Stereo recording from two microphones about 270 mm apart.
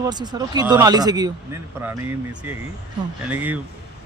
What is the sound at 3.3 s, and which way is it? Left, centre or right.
Speech, centre.